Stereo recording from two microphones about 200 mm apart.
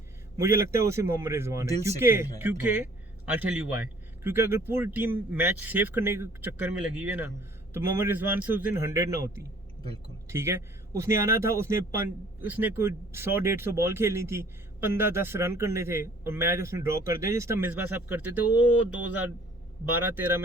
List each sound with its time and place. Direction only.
0.3 s a man's voice: 15° right (ahead or behind)
19.8 s a man's voice: 10° right (ahead or behind)